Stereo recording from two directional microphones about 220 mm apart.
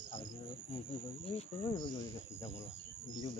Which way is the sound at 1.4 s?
20° left (ahead or behind).